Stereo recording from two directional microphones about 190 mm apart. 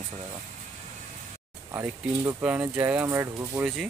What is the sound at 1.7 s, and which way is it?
Speech, 15° right (ahead or behind).